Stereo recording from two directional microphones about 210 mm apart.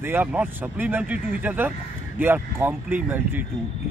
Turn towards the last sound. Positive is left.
turn(degrees=-10)  # may be behind; listen again after turning